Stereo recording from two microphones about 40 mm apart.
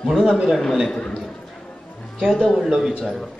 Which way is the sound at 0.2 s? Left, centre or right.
Centre.